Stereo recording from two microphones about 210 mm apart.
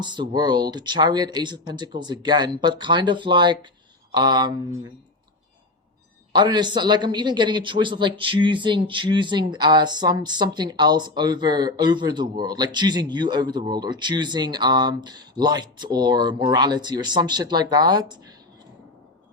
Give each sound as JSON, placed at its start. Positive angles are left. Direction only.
{"t": 0.0, "sound": "speech", "side_deg": -20}
{"t": 6.3, "sound": "speech", "side_deg": -20}